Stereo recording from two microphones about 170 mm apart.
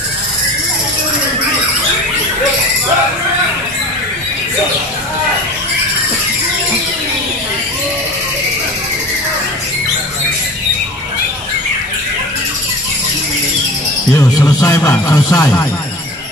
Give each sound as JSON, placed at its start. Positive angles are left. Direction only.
{"t": 14.1, "sound": "speech", "side_deg": 20}